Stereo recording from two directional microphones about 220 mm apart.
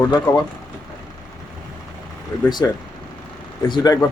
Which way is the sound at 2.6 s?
15° left (ahead or behind).